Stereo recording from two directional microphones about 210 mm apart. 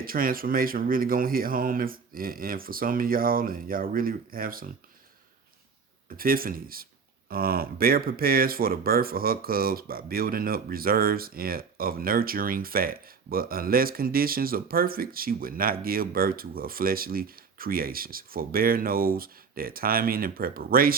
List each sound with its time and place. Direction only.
0.0 s speech: 45° right (ahead or behind)
6.1 s speech: 45° right (ahead or behind)